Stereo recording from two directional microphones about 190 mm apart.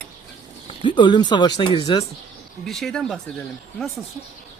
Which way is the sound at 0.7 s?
25° left (ahead or behind).